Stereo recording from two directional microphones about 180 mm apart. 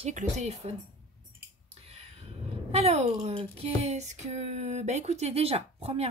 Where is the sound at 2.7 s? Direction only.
35° right (ahead or behind).